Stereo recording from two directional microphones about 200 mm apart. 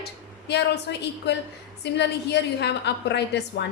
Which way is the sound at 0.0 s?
55° left (ahead or behind).